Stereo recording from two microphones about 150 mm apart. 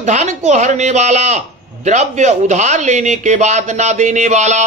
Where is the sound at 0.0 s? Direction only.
50° right (ahead or behind).